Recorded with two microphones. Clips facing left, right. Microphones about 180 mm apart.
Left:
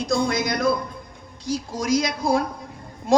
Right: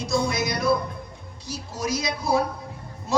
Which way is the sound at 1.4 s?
90° left.